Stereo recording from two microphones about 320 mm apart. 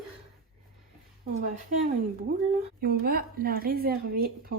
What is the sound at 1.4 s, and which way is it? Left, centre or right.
A woman's voice, right.